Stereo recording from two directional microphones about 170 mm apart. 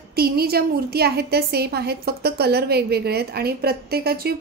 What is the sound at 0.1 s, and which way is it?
A woman's voice, 65° right (ahead or behind).